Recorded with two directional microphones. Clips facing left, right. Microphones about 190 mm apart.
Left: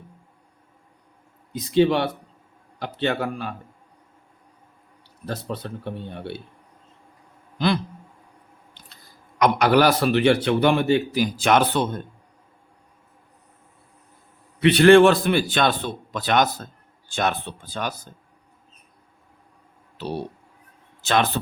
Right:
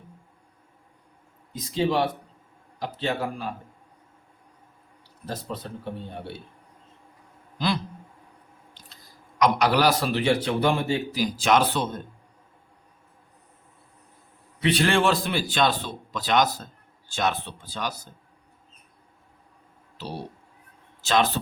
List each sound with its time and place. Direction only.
1.7 s a man's voice: 65° left (ahead or behind)
5.2 s speech: 65° left (ahead or behind)
9.4 s a man's voice: 55° left (ahead or behind)
14.6 s a man's voice: 60° left (ahead or behind)
21.0 s a man's voice: 60° left (ahead or behind)